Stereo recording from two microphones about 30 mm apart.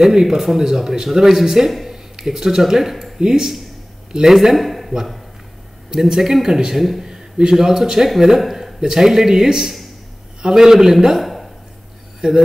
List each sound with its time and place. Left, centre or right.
0.0 s speech: centre
1.9 s a sound: centre
2.7 s speech: centre
3.2 s speech: right
4.6 s a man's voice: centre
6.0 s speech: centre
7.1 s a man's voice: right
8.4 s a sound: centre
8.8 s speech: centre
11.2 s a sound: centre
12.2 s speech: right